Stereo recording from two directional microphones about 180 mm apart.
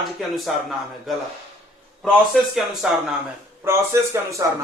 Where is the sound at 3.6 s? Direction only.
15° right (ahead or behind).